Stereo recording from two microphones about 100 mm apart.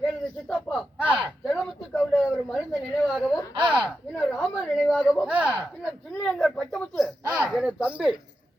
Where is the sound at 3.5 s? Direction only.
55° right (ahead or behind).